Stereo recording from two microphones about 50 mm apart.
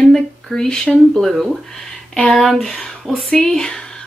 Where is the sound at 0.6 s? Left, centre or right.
Centre.